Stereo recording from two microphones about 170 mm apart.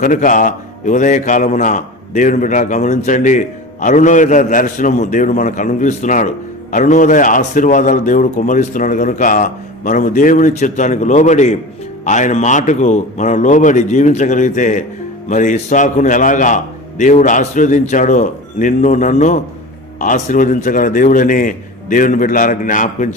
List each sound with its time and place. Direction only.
0.0 s a man's voice: 50° left (ahead or behind)